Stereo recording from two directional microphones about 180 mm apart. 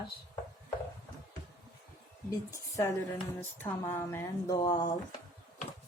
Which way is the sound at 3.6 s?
15° left (ahead or behind).